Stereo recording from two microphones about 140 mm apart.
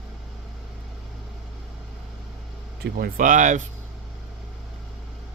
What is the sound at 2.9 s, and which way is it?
Speech, 85° right.